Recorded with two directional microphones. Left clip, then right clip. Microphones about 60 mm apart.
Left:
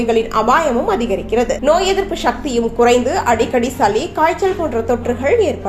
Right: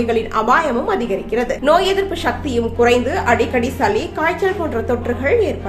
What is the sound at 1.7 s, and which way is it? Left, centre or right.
A woman's voice, centre.